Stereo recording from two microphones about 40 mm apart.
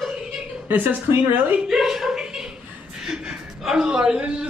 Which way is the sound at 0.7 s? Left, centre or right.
Right.